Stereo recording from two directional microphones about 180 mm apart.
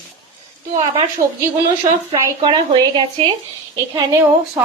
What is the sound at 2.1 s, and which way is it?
A woman's voice, 25° right (ahead or behind).